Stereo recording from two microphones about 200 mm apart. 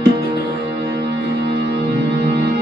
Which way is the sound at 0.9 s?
55° right (ahead or behind).